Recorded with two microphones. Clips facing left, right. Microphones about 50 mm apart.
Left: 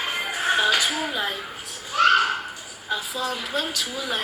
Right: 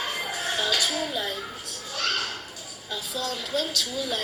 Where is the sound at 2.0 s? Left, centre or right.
Left.